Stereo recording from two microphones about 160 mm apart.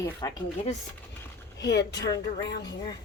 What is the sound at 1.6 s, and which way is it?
Speech, 90° left.